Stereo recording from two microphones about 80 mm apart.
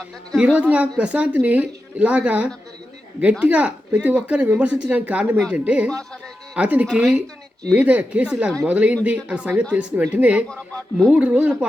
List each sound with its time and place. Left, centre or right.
0.3 s a woman's voice: centre
6.8 s a woman's voice: centre
7.7 s a woman's voice: centre